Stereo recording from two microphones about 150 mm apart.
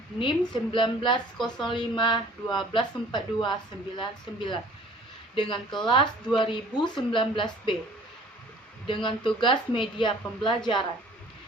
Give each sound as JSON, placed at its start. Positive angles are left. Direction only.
{"t": 0.2, "sound": "speech", "side_deg": 35}
{"t": 8.9, "sound": "speech", "side_deg": 35}